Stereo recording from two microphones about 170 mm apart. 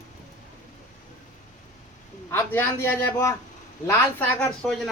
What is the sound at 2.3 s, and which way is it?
Speech, 15° left (ahead or behind).